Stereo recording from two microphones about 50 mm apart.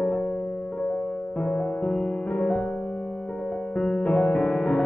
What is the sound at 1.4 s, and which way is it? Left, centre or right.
Music, left.